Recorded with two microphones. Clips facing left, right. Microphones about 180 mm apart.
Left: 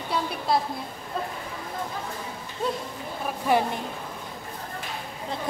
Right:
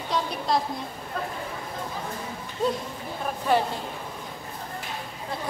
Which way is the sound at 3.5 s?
10° left (ahead or behind).